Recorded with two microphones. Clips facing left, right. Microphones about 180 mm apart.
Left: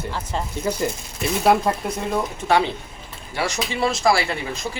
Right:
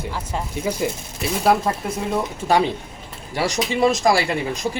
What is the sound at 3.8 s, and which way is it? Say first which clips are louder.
Speech: right 2 dB; 15° right (ahead or behind).